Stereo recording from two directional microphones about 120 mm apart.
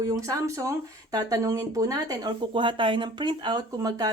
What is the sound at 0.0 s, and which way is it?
Speech, 25° right (ahead or behind).